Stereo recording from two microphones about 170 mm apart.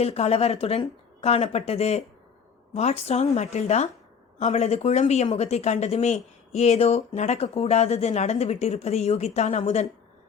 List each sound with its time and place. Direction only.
0.0 s speech: 35° left (ahead or behind)